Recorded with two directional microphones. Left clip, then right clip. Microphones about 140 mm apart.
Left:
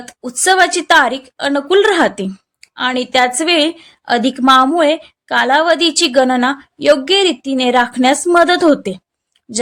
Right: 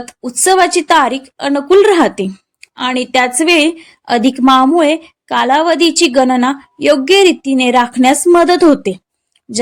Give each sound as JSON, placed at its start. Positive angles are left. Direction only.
{"t": 0.0, "sound": "a woman's voice", "side_deg": -20}